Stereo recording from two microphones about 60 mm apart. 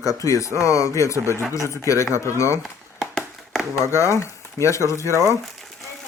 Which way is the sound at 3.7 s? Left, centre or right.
Left.